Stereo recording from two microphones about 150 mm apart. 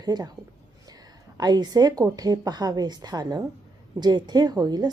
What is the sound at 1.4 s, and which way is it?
A woman's voice, 30° right (ahead or behind).